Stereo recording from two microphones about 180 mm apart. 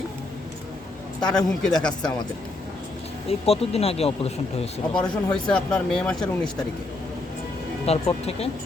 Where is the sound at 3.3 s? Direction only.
35° left (ahead or behind).